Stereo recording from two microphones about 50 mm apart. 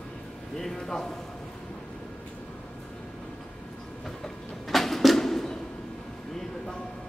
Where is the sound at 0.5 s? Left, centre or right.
Centre.